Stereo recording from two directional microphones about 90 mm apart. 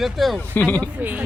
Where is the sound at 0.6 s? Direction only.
20° left (ahead or behind).